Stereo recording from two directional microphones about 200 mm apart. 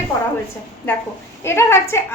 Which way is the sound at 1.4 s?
15° left (ahead or behind).